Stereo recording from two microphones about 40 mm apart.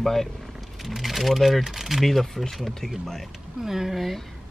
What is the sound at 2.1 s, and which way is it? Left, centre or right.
Speech, centre.